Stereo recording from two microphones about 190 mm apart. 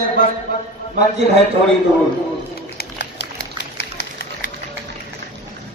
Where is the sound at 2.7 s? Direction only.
60° left (ahead or behind).